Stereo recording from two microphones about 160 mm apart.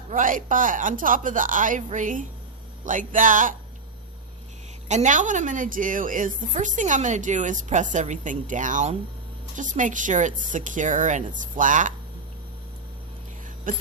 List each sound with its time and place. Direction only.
0.1 s speech: 55° right (ahead or behind)
4.9 s a woman's voice: 50° right (ahead or behind)
13.7 s speech: 55° right (ahead or behind)